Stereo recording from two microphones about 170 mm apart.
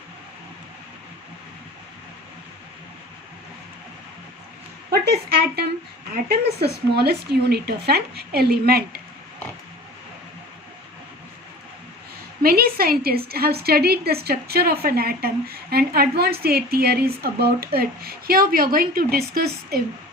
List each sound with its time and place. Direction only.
4.9 s a woman's voice: 70° right (ahead or behind)
12.4 s a woman's voice: 60° right (ahead or behind)